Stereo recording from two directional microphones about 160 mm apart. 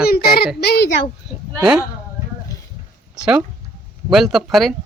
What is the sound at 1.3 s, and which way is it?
Speech, centre (ahead or behind).